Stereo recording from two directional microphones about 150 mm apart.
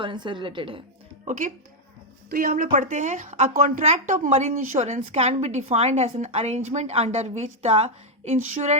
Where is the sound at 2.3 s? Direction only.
70° right (ahead or behind).